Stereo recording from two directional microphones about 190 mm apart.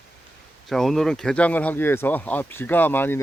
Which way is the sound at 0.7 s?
Centre (ahead or behind).